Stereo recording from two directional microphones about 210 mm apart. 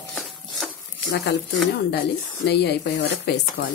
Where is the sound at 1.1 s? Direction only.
55° left (ahead or behind).